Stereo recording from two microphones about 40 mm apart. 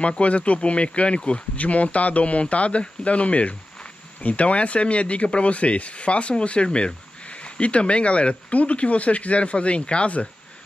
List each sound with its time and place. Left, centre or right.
0.0 s speech: left